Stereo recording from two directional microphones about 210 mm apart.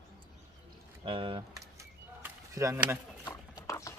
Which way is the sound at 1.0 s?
25° right (ahead or behind).